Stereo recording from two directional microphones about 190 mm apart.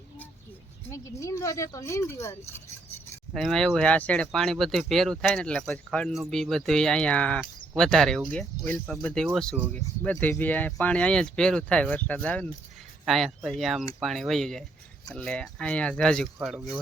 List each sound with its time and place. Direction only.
0.9 s speech: 15° left (ahead or behind)
3.3 s speech: centre (ahead or behind)